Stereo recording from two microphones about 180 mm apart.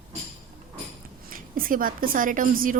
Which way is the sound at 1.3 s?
50° right (ahead or behind).